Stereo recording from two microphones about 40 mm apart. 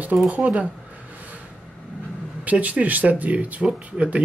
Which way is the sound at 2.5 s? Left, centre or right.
Right.